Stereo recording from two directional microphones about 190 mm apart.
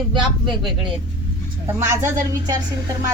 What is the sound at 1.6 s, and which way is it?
Speech, 15° right (ahead or behind).